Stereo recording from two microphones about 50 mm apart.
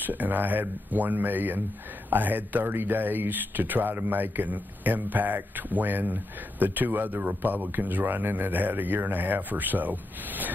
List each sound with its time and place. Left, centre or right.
0.0 s speech: right